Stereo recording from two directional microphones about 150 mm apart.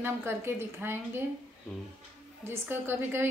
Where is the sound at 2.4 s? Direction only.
15° right (ahead or behind).